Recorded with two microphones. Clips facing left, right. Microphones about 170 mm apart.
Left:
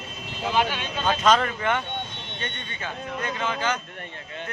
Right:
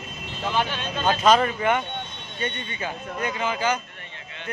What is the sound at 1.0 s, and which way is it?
Speech, 10° right (ahead or behind).